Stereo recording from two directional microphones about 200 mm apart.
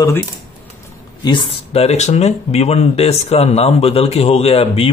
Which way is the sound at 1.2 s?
25° left (ahead or behind).